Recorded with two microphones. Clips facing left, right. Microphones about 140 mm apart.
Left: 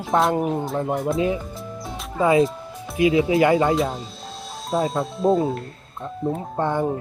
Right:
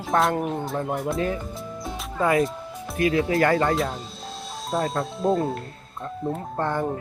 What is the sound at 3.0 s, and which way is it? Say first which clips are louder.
Speech: left 4 dB; 20° left (ahead or behind).